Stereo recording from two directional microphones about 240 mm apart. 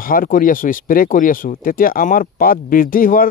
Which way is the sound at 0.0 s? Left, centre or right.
Left.